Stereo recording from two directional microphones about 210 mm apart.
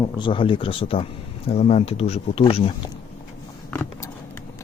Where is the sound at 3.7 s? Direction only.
10° left (ahead or behind).